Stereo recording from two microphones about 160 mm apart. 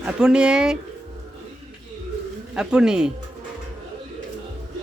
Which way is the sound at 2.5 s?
5° right (ahead or behind).